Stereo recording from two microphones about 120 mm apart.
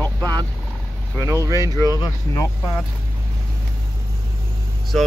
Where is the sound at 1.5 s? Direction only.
30° right (ahead or behind).